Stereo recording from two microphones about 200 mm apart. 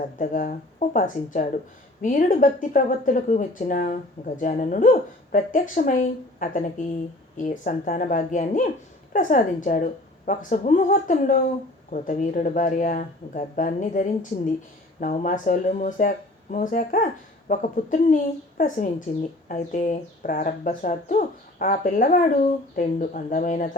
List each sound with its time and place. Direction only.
0.2 s speech: 45° left (ahead or behind)